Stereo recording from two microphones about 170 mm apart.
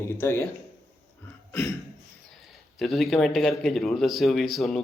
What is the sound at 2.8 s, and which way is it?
Speech, centre (ahead or behind).